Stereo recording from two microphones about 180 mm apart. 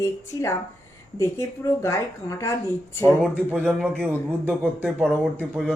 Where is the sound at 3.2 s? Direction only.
5° right (ahead or behind).